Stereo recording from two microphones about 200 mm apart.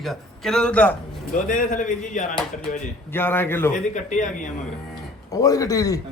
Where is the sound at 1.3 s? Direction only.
40° left (ahead or behind).